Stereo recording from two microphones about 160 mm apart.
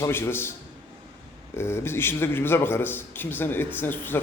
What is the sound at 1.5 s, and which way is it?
A man's voice, 15° left (ahead or behind).